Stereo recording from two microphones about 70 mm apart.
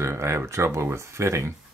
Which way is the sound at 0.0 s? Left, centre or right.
Right.